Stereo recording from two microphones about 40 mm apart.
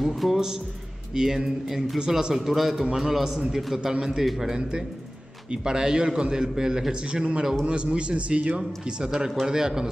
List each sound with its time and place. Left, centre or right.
0.0 s speech: centre
1.1 s a man's voice: centre
2.4 s a man's voice: centre
4.6 s a man's voice: right
9.0 s a man's voice: centre